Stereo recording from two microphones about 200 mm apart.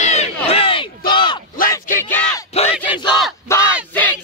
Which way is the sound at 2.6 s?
30° left (ahead or behind).